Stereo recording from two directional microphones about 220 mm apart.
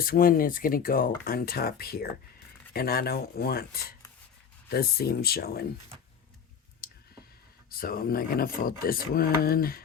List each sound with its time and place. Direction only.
0.0 s speech: 40° left (ahead or behind)
6.8 s clicking: 45° left (ahead or behind)
7.7 s speech: 40° left (ahead or behind)